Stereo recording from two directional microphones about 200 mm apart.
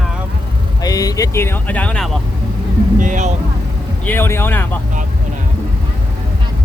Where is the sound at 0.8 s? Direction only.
20° left (ahead or behind).